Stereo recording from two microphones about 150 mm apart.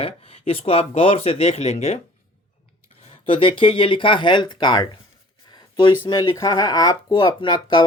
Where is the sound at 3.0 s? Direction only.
35° left (ahead or behind).